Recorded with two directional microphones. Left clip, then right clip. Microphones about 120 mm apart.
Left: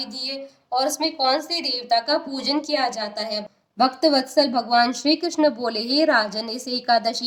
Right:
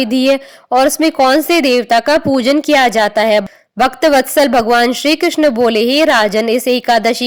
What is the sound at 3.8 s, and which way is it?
A woman's voice, 65° right (ahead or behind).